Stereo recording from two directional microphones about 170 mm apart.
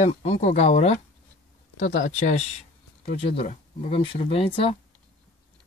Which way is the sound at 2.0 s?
40° left (ahead or behind).